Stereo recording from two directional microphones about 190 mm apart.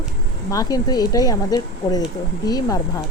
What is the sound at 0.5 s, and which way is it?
Speech, 20° left (ahead or behind).